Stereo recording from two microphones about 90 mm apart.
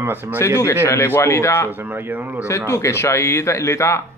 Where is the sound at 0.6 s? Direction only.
30° left (ahead or behind).